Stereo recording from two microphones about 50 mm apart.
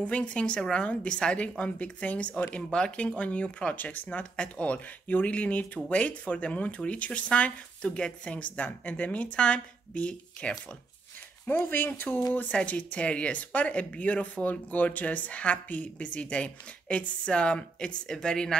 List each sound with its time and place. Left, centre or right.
0.0 s speech: left
3.7 s speech: left
4.2 s speech: left
11.4 s speech: left
12.5 s speech: left